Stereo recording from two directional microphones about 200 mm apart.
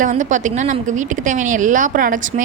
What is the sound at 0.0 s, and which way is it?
A woman's voice, 40° right (ahead or behind).